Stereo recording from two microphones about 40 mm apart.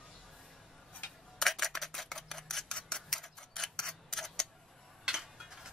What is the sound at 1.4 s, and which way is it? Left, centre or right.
Scissors, centre.